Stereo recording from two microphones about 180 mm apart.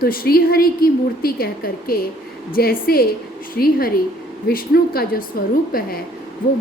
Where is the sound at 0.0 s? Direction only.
55° left (ahead or behind).